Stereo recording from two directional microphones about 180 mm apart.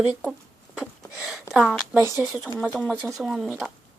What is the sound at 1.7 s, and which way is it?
Speech, 5° left (ahead or behind).